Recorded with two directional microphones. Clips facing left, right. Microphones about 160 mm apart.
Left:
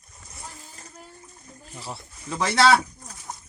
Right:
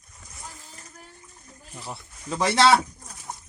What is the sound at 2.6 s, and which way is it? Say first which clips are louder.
Speech: even; 20° right (ahead or behind).